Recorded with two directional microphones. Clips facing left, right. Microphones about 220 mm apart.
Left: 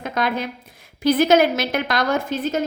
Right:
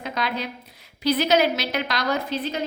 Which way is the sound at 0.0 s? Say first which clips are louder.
Left 4 dB; 50° left (ahead or behind).